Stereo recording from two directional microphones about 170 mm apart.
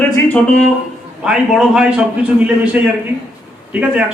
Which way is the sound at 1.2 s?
5° right (ahead or behind).